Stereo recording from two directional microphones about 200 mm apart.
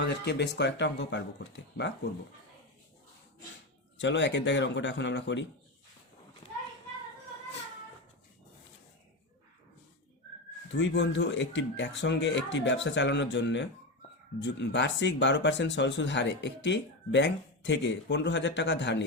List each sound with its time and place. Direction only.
0.0 s speech: 60° left (ahead or behind)
3.9 s speech: 60° left (ahead or behind)
10.7 s speech: 65° left (ahead or behind)